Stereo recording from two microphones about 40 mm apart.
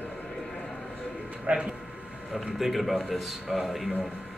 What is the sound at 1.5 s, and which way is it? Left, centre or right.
Speech, right.